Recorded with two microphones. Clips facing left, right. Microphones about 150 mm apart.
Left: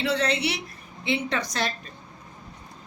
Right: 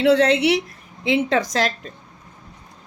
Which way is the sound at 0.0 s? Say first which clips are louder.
Right 9 dB; 90° right.